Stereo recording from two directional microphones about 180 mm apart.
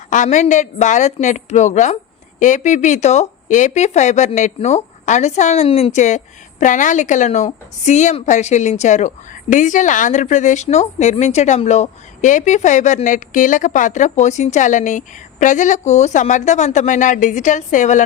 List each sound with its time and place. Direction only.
0.1 s speech: 45° left (ahead or behind)